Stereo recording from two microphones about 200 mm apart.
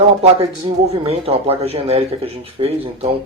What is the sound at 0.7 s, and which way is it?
Speech, 25° right (ahead or behind).